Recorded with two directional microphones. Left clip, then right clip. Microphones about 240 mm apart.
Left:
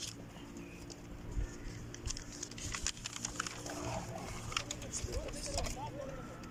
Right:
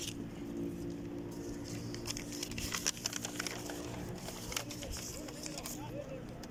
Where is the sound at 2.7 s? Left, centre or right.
Right.